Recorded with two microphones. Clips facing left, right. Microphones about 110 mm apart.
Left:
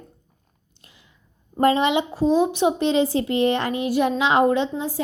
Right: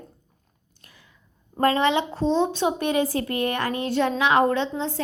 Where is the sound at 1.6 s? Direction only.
20° left (ahead or behind).